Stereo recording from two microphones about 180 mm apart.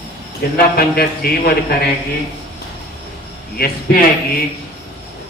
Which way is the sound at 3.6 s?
55° left (ahead or behind).